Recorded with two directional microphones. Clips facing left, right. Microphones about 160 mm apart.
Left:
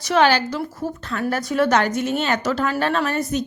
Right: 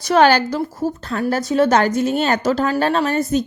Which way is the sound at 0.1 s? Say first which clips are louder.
Right 4 dB; 45° right (ahead or behind).